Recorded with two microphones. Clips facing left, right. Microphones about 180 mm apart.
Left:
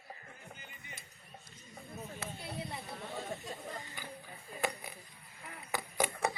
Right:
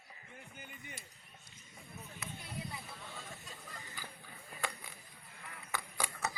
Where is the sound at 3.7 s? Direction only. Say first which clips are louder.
Left 5 dB; 20° left (ahead or behind).